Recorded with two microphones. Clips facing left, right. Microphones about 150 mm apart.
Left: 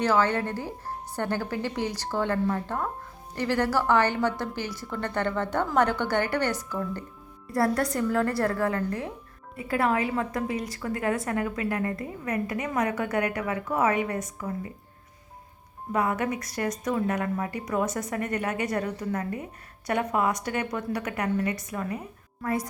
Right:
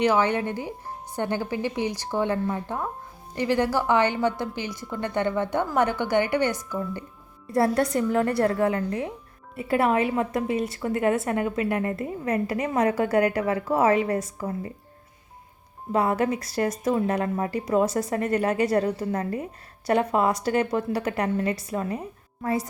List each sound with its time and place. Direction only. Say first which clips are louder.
0.0 s a woman's voice: right 2 dB; 15° right (ahead or behind); by 14.7 s 30° right (ahead or behind)
15.9 s a woman's voice: right 4 dB; 30° right (ahead or behind)